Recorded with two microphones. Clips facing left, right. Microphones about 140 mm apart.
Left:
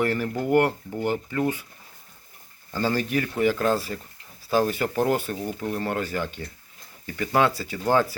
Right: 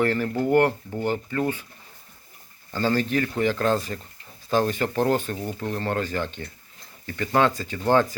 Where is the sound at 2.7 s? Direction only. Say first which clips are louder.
Right 2 dB; 10° left (ahead or behind).